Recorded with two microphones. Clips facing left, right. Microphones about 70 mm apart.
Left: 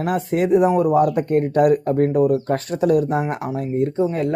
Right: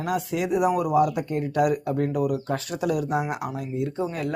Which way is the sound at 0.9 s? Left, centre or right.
Left.